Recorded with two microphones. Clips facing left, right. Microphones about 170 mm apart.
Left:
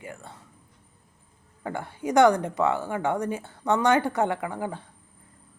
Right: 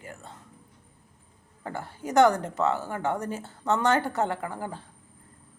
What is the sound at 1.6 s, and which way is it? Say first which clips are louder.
Speech: left 4 dB; 15° left (ahead or behind).